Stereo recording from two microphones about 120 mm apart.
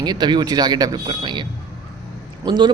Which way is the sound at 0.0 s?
35° right (ahead or behind).